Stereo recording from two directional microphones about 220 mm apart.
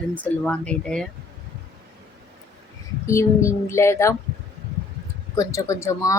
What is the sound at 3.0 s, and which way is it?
Speech, 15° left (ahead or behind).